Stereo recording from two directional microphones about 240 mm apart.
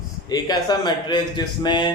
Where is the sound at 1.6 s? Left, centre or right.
Centre.